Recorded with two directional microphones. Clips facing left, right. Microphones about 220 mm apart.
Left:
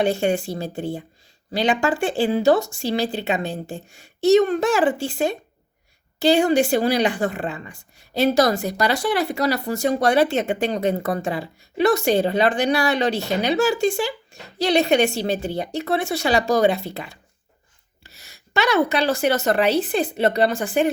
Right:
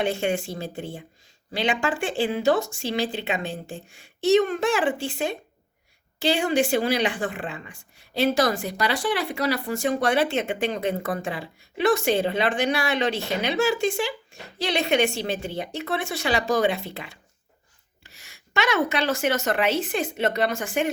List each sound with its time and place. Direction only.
0.0 s speech: 40° left (ahead or behind)